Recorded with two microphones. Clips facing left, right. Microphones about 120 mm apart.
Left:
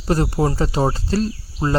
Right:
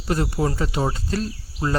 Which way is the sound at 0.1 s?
35° left (ahead or behind).